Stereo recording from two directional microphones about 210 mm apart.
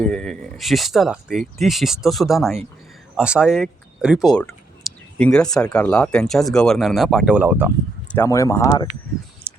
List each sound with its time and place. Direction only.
0.0 s speech: 5° left (ahead or behind)
8.0 s speech: 10° left (ahead or behind)